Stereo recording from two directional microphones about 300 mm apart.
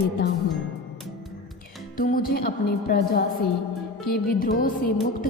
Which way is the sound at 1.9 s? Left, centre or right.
Left.